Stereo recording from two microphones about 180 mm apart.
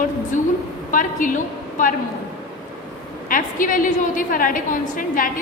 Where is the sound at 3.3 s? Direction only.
50° left (ahead or behind).